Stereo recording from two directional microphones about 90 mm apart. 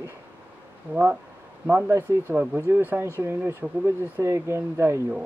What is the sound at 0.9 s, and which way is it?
Speech, 15° right (ahead or behind).